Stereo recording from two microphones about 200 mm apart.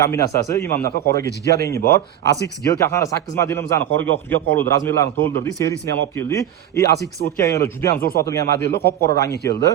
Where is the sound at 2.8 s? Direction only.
15° left (ahead or behind).